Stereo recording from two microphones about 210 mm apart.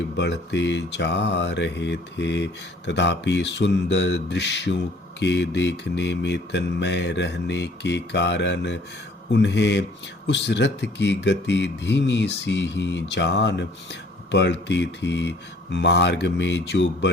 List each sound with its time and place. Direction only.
0.2 s mantra: 55° left (ahead or behind)